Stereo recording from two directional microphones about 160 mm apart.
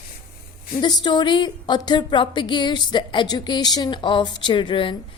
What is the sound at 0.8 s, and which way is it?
Speech, 30° left (ahead or behind).